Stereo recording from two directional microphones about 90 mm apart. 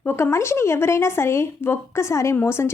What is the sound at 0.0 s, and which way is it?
A woman's voice, 25° left (ahead or behind).